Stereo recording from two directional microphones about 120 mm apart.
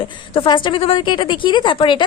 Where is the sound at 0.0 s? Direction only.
45° left (ahead or behind).